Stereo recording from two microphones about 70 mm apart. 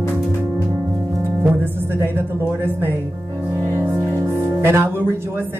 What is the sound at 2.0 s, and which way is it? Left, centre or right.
Speech, right.